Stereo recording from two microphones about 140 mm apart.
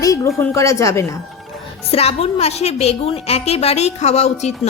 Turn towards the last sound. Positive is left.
turn(degrees=50)  # may be behind; listen again after turning